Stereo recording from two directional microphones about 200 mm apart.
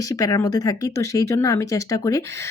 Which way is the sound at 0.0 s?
15° left (ahead or behind).